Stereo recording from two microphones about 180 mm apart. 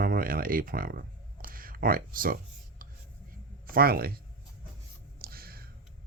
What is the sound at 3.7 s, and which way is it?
Speech, 55° right (ahead or behind).